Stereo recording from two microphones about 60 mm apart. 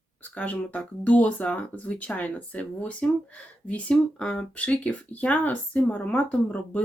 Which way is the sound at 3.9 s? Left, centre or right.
Centre.